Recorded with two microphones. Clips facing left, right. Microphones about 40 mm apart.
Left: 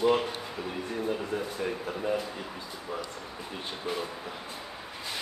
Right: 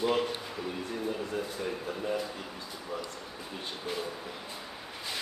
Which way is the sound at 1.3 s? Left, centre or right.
Left.